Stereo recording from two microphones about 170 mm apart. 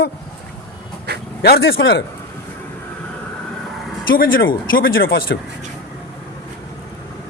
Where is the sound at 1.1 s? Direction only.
75° right (ahead or behind).